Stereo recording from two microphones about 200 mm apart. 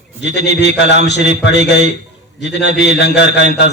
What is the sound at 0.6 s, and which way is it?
Speech, 60° left (ahead or behind).